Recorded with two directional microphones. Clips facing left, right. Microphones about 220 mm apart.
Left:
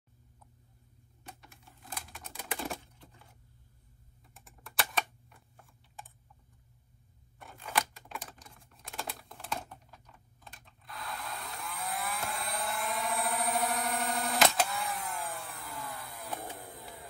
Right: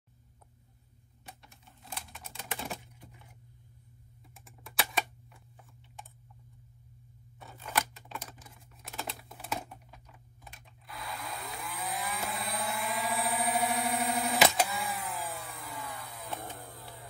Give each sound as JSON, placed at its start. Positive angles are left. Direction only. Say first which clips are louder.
{"t": 2.1, "sound": "typing", "louder": "left 3 dB", "side_deg": 0}
{"t": 2.8, "sound": "typewriter", "louder": "right 2 dB", "side_deg": -15}
{"t": 4.3, "sound": "typing", "louder": "right 1 dB", "side_deg": 0}
{"t": 7.4, "sound": "a sound", "louder": "right 1 dB", "side_deg": -5}
{"t": 7.9, "sound": "typing", "louder": "even", "side_deg": 0}
{"t": 16.5, "sound": "a sound", "louder": "left 1 dB", "side_deg": 15}